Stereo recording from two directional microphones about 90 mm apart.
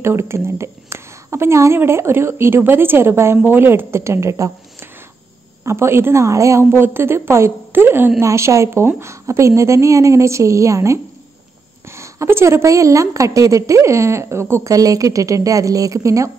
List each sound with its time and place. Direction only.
0.0 s a woman's voice: 30° right (ahead or behind)
5.7 s a woman's voice: 30° right (ahead or behind)